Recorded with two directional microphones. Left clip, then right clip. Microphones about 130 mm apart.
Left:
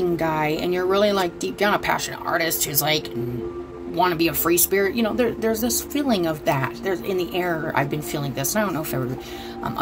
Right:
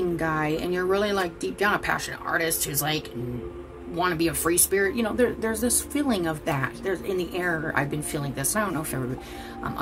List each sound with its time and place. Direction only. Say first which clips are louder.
0.2 s speech: left 4 dB; 30° left (ahead or behind)